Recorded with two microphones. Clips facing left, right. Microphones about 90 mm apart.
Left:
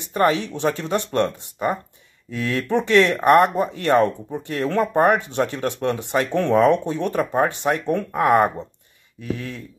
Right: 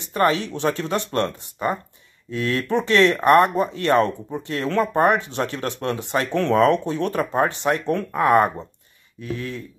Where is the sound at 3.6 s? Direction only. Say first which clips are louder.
Left 1 dB; 25° left (ahead or behind).